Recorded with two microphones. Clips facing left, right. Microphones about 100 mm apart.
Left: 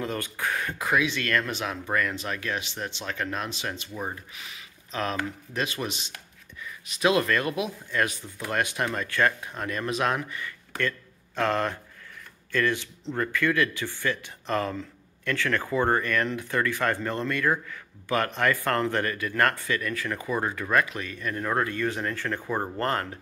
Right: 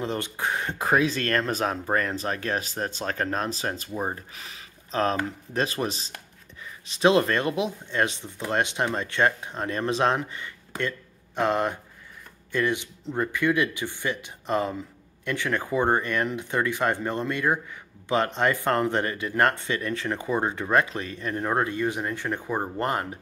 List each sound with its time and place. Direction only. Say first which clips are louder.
0.0 s speech: right 2 dB; 25° right (ahead or behind)